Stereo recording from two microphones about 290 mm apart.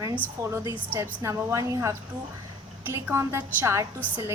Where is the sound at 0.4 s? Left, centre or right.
Centre.